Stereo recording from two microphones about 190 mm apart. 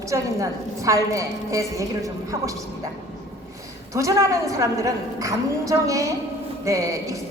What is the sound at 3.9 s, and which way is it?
A woman's voice, 15° right (ahead or behind).